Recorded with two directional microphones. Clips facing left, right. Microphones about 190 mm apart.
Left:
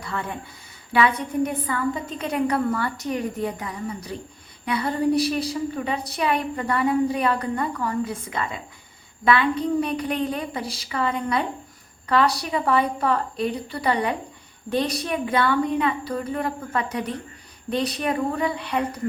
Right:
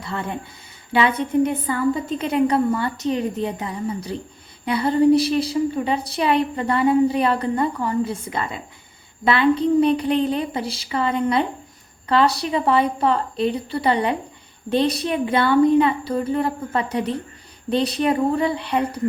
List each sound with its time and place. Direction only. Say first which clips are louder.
0.9 s a woman's voice: right 3 dB; 25° right (ahead or behind)